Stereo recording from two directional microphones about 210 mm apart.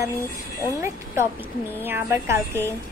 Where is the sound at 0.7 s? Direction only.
10° right (ahead or behind).